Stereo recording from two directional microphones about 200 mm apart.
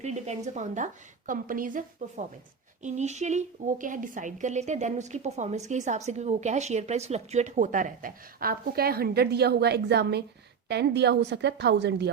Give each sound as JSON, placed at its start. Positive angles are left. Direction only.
{"t": 0.0, "sound": "a woman's voice", "side_deg": -35}